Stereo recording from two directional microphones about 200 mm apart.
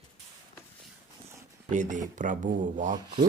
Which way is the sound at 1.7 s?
35° right (ahead or behind).